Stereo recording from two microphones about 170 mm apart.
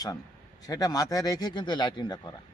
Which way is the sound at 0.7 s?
20° left (ahead or behind).